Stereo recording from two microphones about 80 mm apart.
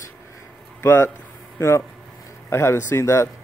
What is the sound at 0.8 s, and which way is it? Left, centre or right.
Speech, left.